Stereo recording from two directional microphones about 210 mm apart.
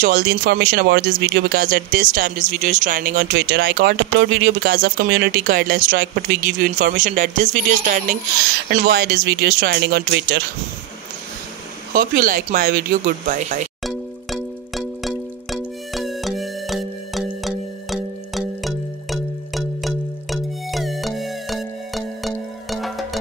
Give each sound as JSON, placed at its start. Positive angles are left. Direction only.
{"t": 0.0, "sound": "speech", "side_deg": -45}
{"t": 3.3, "sound": "speech", "side_deg": -50}
{"t": 11.9, "sound": "speech", "side_deg": -40}
{"t": 13.8, "sound": "music", "side_deg": 0}